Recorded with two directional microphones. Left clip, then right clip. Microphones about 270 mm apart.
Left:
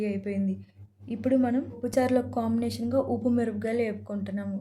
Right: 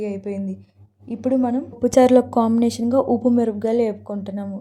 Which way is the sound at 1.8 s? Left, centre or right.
Right.